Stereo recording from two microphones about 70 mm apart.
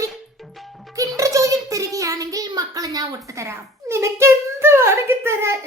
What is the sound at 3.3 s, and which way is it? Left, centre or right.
A child's voice, right.